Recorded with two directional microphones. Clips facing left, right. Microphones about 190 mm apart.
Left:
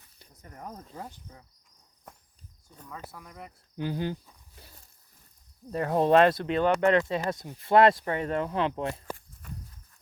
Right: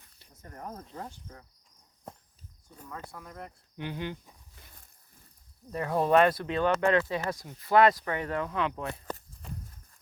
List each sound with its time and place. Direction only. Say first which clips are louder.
0.9 s cricket: even; 15° left (ahead or behind)
2.9 s speech: right 1 dB; 5° left (ahead or behind)
3.8 s speech: left 5 dB; 35° left (ahead or behind)
5.9 s speech: left 2 dB; 25° left (ahead or behind)